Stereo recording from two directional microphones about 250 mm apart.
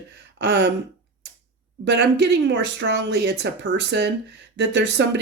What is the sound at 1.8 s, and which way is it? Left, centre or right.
Speech, right.